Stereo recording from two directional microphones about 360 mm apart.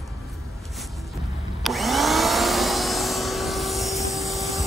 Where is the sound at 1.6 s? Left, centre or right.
Centre.